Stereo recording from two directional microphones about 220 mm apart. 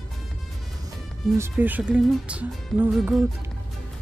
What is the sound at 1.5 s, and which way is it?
Speech, 5° right (ahead or behind).